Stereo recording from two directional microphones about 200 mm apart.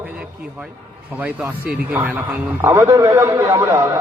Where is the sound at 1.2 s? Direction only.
5° right (ahead or behind).